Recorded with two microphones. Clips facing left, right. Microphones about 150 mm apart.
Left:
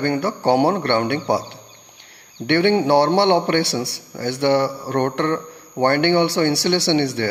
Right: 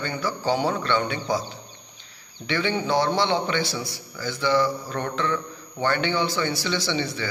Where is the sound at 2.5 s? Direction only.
70° left (ahead or behind).